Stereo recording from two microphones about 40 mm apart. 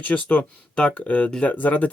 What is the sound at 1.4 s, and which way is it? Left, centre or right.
Speech, left.